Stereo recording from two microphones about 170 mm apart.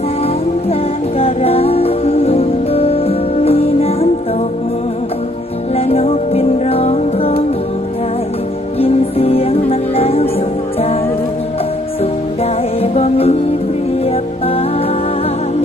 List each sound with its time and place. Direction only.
1.2 s music: 35° left (ahead or behind)
5.7 s music: 35° left (ahead or behind)
8.8 s music: 35° left (ahead or behind)
12.4 s music: 35° left (ahead or behind)